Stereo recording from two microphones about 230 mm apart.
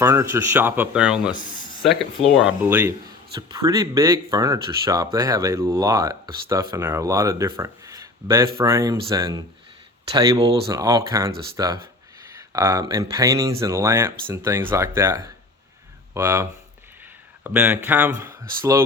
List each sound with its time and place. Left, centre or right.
0.0 s speech: centre